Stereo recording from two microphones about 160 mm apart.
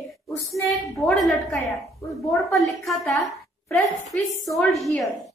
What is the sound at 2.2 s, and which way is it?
A woman's voice, centre (ahead or behind).